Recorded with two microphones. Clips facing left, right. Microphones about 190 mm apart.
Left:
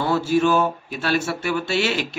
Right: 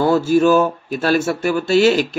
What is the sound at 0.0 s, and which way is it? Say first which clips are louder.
Speech: right 5 dB; 45° right (ahead or behind).